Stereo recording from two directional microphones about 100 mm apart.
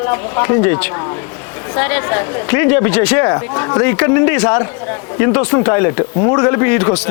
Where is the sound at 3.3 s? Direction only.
25° left (ahead or behind).